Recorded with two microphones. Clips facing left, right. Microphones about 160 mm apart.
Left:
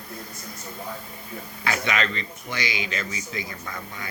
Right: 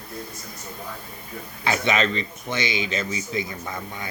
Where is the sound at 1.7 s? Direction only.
25° right (ahead or behind).